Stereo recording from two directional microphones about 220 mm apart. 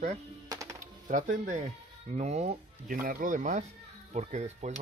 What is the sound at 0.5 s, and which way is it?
Music, 15° right (ahead or behind).